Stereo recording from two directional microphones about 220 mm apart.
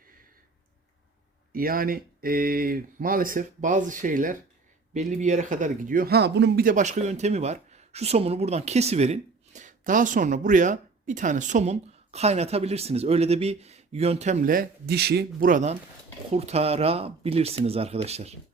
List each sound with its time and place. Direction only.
1.5 s speech: 40° right (ahead or behind)